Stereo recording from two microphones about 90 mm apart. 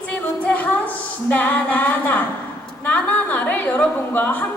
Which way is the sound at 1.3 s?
20° left (ahead or behind).